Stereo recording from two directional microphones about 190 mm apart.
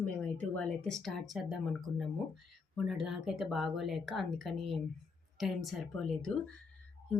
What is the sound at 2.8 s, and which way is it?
A woman's voice, centre (ahead or behind).